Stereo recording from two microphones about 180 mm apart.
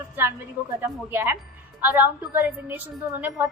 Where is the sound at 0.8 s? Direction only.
15° right (ahead or behind).